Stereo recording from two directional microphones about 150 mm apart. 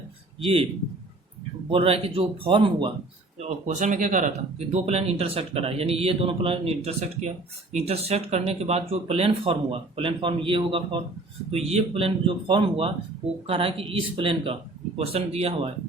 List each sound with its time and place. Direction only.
1.7 s speech: 40° right (ahead or behind)
3.4 s speech: 55° right (ahead or behind)